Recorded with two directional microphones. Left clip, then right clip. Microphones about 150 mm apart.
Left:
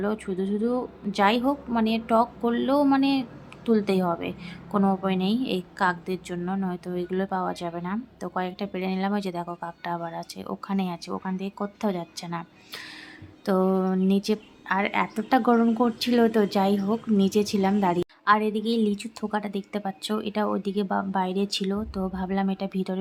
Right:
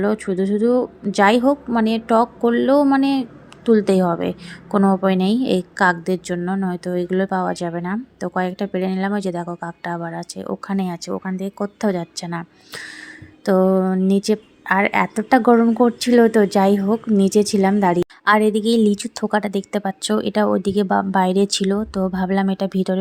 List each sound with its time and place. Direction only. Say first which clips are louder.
0.0 s a woman's voice: right 8 dB; 30° right (ahead or behind)
18.3 s a woman's voice: right 7 dB; 50° right (ahead or behind)